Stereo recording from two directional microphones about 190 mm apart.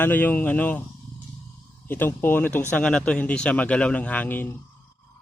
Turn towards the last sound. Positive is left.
turn(degrees=10)  # may be behind; listen again after turning